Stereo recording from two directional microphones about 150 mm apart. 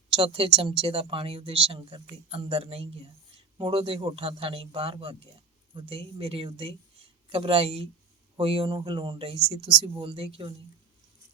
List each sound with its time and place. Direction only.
0.1 s speech: 35° right (ahead or behind)